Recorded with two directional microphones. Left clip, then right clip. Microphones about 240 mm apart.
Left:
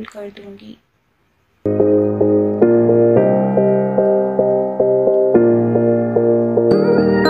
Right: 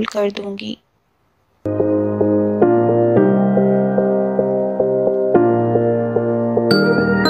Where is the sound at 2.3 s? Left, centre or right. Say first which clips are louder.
Even; centre.